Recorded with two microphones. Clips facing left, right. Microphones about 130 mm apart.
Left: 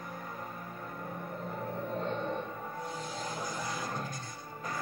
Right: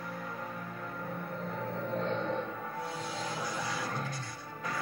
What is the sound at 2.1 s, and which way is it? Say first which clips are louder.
Music: right 2 dB; 5° left (ahead or behind).